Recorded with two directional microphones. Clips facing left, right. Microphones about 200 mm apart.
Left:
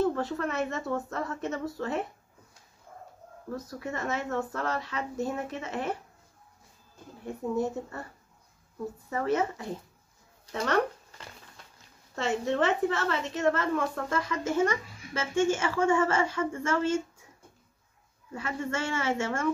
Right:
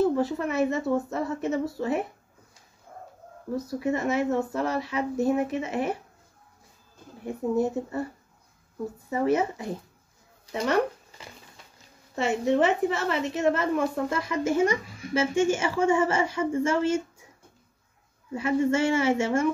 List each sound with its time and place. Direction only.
0.0 s a woman's voice: 10° right (ahead or behind)
3.5 s a woman's voice: 10° right (ahead or behind)
9.1 s a woman's voice: 15° right (ahead or behind)
10.5 s a sound: 15° right (ahead or behind)
12.2 s a woman's voice: 10° right (ahead or behind)
18.3 s a woman's voice: 15° right (ahead or behind)